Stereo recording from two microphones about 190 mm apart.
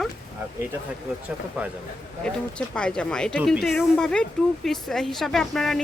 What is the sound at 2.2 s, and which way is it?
Speech, 5° left (ahead or behind).